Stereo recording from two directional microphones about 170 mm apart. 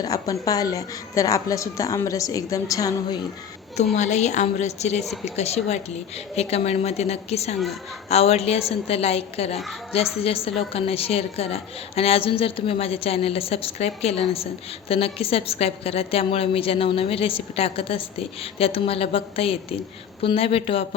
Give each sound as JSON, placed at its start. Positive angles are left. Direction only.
{"t": 0.0, "sound": "a woman's voice", "side_deg": 20}
{"t": 3.9, "sound": "a woman's voice", "side_deg": 45}